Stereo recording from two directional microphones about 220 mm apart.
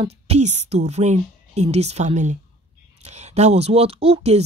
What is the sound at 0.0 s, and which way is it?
Speech, 30° right (ahead or behind).